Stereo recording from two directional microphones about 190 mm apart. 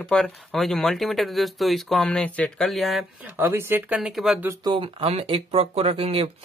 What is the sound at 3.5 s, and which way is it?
Speech, 10° right (ahead or behind).